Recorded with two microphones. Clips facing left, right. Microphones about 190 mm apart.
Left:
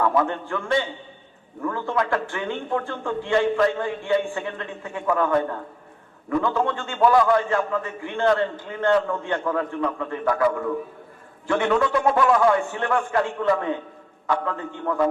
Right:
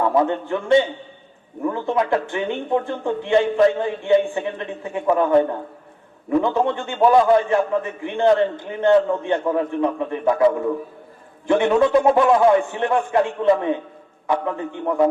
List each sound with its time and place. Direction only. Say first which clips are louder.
0.0 s a man's voice: right 3 dB; 20° right (ahead or behind)